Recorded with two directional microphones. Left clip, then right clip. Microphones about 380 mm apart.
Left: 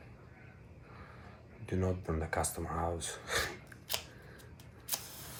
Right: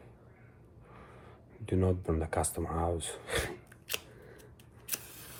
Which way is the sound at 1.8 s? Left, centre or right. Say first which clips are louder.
Right 4 dB; right.